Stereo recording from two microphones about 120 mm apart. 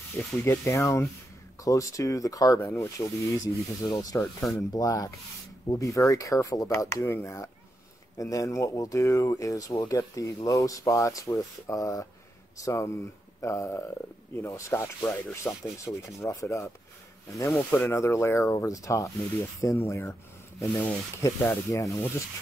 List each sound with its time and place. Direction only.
0.2 s speech: 20° left (ahead or behind)
17.6 s speech: 15° left (ahead or behind)